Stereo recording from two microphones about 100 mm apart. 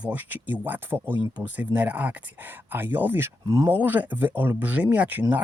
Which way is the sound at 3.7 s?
15° right (ahead or behind).